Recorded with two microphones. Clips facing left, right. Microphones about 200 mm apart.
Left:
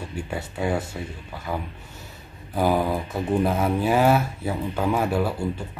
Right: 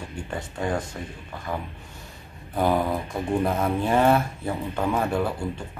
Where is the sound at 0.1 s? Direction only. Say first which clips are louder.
Left 2 dB; 5° left (ahead or behind).